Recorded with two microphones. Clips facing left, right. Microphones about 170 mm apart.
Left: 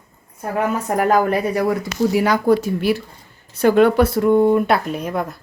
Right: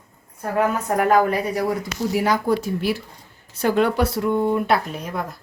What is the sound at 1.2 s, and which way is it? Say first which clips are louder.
Speech: left 3 dB; 60° left (ahead or behind).